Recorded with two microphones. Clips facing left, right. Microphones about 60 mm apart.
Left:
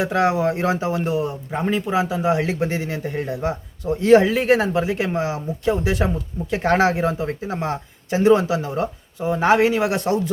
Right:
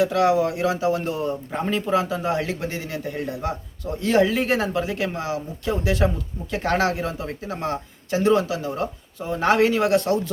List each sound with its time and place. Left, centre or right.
0.0 s speech: left